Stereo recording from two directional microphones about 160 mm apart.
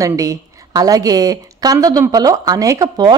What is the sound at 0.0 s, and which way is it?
A woman's voice, 20° right (ahead or behind).